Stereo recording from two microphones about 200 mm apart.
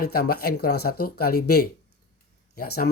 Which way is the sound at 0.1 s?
50° left (ahead or behind).